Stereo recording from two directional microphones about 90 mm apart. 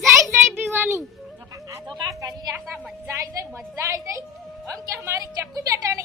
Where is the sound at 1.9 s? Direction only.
40° right (ahead or behind).